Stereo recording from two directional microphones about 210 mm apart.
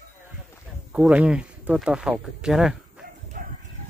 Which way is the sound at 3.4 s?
40° right (ahead or behind).